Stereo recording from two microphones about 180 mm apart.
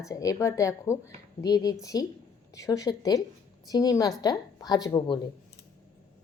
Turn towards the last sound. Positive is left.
turn(degrees=20)  # may be behind; listen again after turning